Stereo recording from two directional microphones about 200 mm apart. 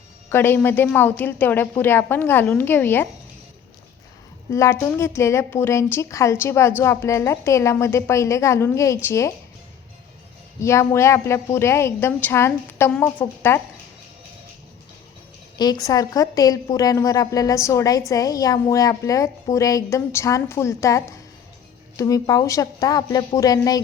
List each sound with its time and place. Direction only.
0.3 s a woman's voice: 10° left (ahead or behind)
4.5 s a woman's voice: 15° left (ahead or behind)
10.6 s a woman's voice: 15° left (ahead or behind)
15.5 s a woman's voice: 20° left (ahead or behind)